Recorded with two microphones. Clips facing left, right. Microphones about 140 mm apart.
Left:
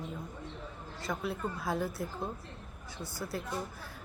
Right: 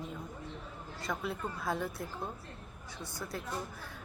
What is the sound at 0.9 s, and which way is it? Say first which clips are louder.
Speech: left 1 dB; centre (ahead or behind).